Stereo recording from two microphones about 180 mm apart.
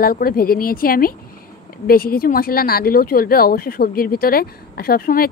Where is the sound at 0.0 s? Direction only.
55° left (ahead or behind).